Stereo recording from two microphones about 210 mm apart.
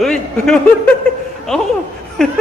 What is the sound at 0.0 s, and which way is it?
Speech, centre (ahead or behind).